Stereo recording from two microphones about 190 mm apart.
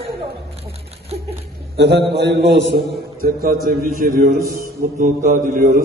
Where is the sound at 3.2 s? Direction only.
50° right (ahead or behind).